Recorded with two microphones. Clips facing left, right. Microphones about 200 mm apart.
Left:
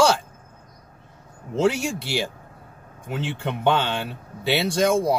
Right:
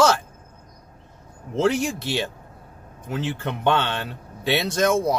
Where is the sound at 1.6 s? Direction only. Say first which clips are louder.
Even; 10° left (ahead or behind).